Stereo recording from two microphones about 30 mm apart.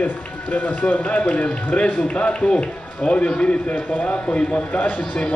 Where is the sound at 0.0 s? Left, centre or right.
Left.